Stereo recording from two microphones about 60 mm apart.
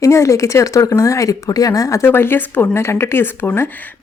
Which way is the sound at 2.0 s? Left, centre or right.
Left.